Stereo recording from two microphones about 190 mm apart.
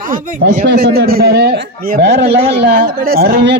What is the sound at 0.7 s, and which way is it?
A man's voice, 55° right (ahead or behind).